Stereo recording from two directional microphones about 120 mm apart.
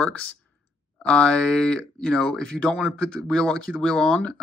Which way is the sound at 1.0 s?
5° left (ahead or behind).